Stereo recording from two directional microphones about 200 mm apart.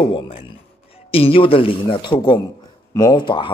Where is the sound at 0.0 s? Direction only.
30° left (ahead or behind).